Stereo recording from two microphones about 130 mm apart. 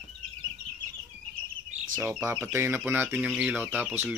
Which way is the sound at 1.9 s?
15° right (ahead or behind).